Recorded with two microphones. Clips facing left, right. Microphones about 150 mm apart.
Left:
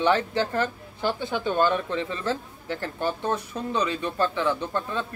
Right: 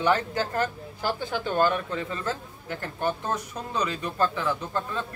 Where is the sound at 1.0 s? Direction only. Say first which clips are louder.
Left 2 dB; 20° left (ahead or behind).